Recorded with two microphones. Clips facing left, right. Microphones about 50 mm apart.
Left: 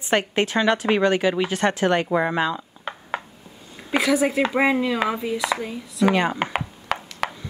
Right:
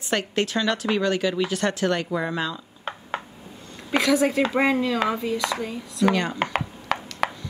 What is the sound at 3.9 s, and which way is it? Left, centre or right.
Speech, centre.